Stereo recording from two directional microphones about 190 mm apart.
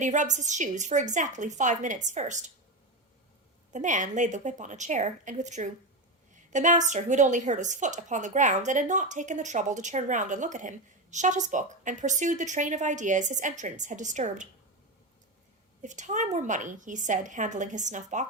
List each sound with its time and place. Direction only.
0.0 s a woman's voice: 40° right (ahead or behind)
3.7 s a woman's voice: 40° right (ahead or behind)
15.8 s a woman's voice: 40° right (ahead or behind)